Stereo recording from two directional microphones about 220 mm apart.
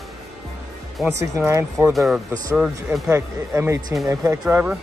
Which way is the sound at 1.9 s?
Centre (ahead or behind).